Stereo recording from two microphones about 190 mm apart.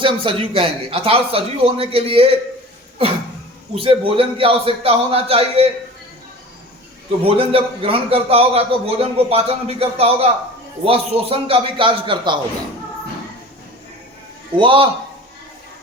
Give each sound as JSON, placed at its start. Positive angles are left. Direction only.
{"t": 0.0, "sound": "speech", "side_deg": -25}
{"t": 3.8, "sound": "speech", "side_deg": -30}
{"t": 7.3, "sound": "a man's voice", "side_deg": -30}
{"t": 14.5, "sound": "speech", "side_deg": -25}